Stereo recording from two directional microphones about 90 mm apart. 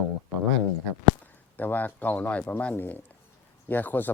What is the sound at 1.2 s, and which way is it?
Speech, 20° left (ahead or behind).